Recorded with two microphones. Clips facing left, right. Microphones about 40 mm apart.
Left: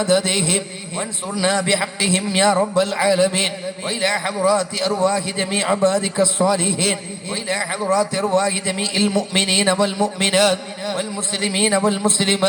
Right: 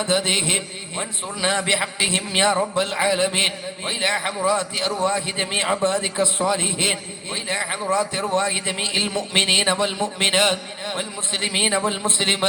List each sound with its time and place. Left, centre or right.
0.0 s a man's voice: right